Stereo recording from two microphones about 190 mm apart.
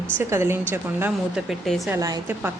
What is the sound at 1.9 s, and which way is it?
Speech, 15° right (ahead or behind).